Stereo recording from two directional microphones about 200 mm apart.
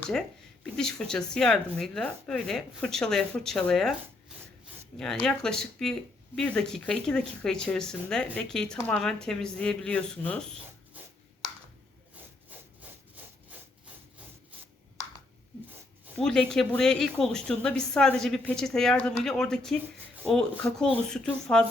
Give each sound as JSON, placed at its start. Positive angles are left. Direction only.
{"t": 0.1, "sound": "speech", "side_deg": 5}
{"t": 4.9, "sound": "speech", "side_deg": 0}
{"t": 16.1, "sound": "speech", "side_deg": 5}